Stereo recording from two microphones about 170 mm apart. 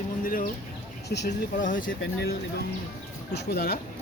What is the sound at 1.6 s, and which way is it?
Speech, 50° left (ahead or behind).